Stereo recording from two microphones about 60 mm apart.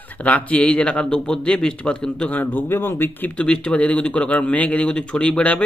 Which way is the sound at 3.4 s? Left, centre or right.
Centre.